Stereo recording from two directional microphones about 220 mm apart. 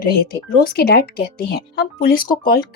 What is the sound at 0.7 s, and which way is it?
Speech, 45° left (ahead or behind).